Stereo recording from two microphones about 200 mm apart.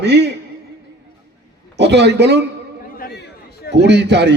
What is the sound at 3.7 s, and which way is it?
Speech, 60° right (ahead or behind).